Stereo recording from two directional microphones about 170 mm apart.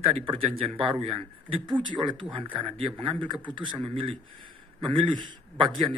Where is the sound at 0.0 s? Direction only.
30° right (ahead or behind).